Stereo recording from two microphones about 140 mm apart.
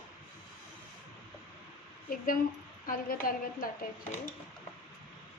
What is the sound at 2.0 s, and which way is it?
A woman's voice, 80° left.